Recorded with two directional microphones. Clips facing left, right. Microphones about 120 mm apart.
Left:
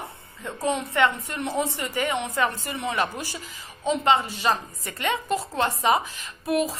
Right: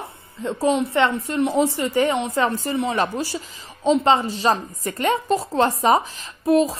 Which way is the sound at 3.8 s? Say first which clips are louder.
Right 5 dB; 35° right (ahead or behind).